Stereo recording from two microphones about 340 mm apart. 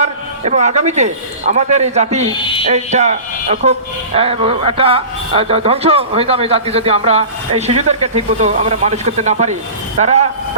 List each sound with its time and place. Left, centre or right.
0.0 s a man's voice: centre